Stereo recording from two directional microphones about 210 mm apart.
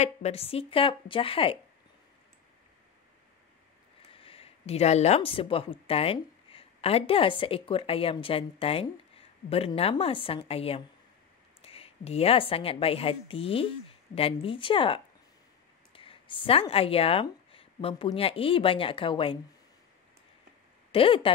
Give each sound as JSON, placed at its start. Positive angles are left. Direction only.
{"t": 0.0, "sound": "a woman's voice", "side_deg": 30}
{"t": 4.1, "sound": "a woman's voice", "side_deg": 25}
{"t": 20.9, "sound": "a woman's voice", "side_deg": 25}